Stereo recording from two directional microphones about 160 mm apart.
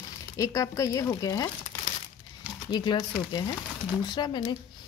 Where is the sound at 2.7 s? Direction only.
25° left (ahead or behind).